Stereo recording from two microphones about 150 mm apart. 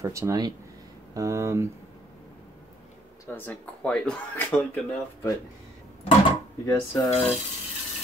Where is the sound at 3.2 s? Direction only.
15° left (ahead or behind).